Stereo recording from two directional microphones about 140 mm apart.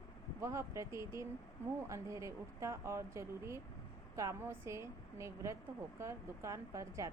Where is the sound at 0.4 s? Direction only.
20° right (ahead or behind).